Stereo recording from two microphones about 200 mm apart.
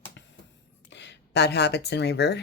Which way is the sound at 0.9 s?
60° left (ahead or behind).